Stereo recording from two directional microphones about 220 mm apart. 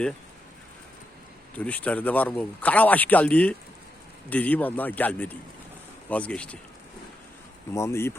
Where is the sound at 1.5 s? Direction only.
5° left (ahead or behind).